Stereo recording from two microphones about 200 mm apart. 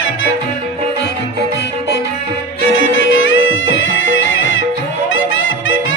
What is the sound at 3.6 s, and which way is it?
Music, 75° left (ahead or behind).